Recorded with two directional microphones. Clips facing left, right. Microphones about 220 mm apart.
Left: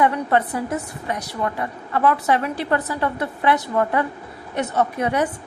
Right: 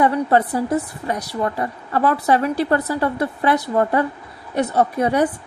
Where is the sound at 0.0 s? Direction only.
35° right (ahead or behind).